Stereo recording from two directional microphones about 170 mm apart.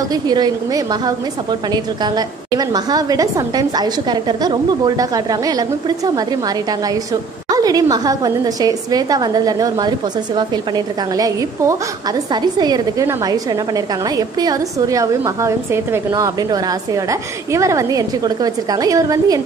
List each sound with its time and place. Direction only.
0.1 s a woman's voice: 25° right (ahead or behind)
7.4 s a woman's voice: 20° right (ahead or behind)